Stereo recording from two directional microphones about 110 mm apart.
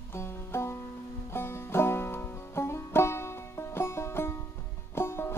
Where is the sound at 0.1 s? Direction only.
25° left (ahead or behind).